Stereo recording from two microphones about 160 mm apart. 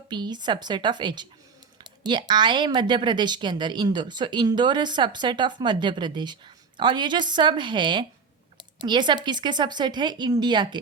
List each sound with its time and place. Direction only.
0.1 s a woman's voice: 25° right (ahead or behind)